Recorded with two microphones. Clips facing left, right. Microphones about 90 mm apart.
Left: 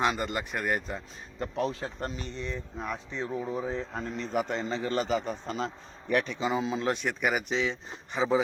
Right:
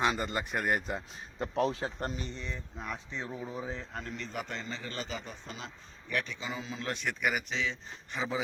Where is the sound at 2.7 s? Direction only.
15° left (ahead or behind).